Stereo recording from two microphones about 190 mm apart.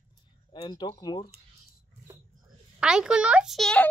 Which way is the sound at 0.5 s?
25° left (ahead or behind).